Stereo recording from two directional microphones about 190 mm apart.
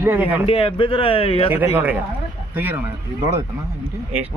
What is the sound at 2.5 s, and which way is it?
Speech, 10° right (ahead or behind).